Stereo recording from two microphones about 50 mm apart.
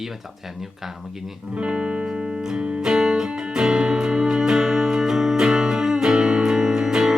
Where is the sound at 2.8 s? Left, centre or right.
Centre.